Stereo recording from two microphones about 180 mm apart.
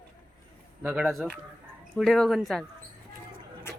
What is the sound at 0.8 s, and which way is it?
A man's voice, 10° right (ahead or behind).